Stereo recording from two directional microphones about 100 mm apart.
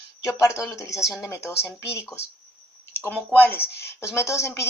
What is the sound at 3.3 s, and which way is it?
A woman's voice, 20° left (ahead or behind).